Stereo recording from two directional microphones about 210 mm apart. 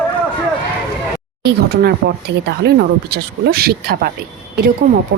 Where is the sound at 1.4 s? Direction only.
45° right (ahead or behind).